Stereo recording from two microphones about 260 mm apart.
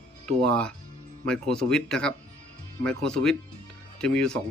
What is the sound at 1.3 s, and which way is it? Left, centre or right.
Speech, centre.